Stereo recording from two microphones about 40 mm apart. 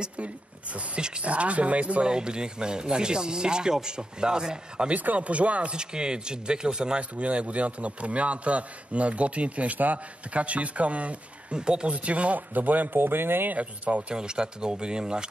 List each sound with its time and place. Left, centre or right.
0.7 s speech: right
1.2 s a man's voice: right
2.0 s speech: right
4.8 s a man's voice: right
5.8 s speech: right
7.0 s a man's voice: right
11.5 s speech: right
11.9 s speech: right
13.5 s a man's voice: right
14.1 s speech: right